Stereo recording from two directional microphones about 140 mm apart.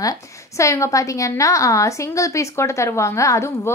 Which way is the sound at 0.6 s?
20° left (ahead or behind).